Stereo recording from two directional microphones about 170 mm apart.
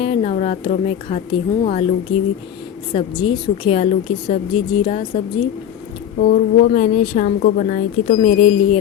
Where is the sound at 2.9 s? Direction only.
30° left (ahead or behind).